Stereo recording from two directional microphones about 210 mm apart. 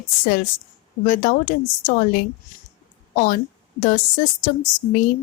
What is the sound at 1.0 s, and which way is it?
A woman's voice, 40° left (ahead or behind).